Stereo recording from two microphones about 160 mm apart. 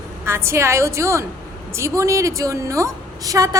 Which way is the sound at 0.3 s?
15° right (ahead or behind).